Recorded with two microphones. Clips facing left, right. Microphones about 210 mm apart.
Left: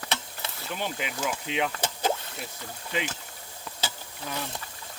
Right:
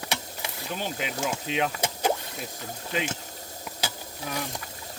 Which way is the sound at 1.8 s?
10° right (ahead or behind).